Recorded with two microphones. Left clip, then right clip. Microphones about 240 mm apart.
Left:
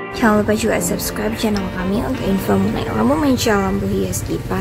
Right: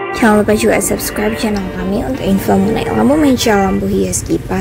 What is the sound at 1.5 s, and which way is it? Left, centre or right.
Speech, centre.